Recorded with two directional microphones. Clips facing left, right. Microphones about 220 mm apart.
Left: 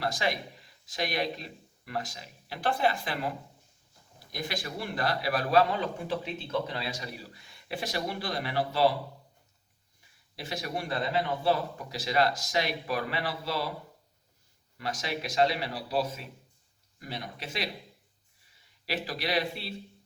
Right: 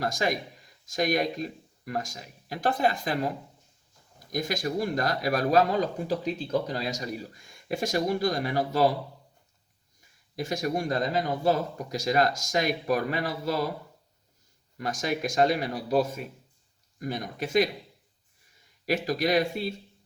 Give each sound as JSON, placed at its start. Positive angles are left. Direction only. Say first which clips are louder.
{"t": 0.0, "sound": "speech", "louder": "right 3 dB", "side_deg": -45}
{"t": 10.3, "sound": "speech", "louder": "right 7 dB", "side_deg": -45}
{"t": 14.8, "sound": "speech", "louder": "right 5 dB", "side_deg": -45}
{"t": 18.9, "sound": "speech", "louder": "right 7 dB", "side_deg": -45}